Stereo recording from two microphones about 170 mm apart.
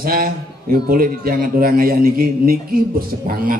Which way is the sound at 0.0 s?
60° right (ahead or behind).